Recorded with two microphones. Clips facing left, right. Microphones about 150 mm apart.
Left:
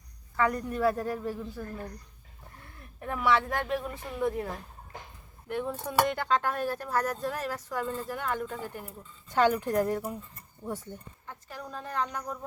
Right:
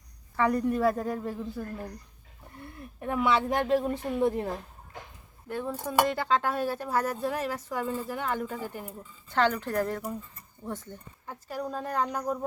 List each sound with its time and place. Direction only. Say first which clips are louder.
0.3 s speech: right 3 dB; centre (ahead or behind)
3.0 s speech: right 5 dB; 5° right (ahead or behind)
3.3 s speech: right 4 dB; 25° right (ahead or behind)
5.5 s speech: even; centre (ahead or behind)
9.3 s speech: left 2 dB; 10° left (ahead or behind)
11.3 s speech: right 7 dB; 40° right (ahead or behind)